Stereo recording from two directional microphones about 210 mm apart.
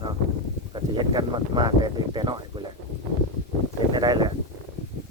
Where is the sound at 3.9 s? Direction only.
20° right (ahead or behind).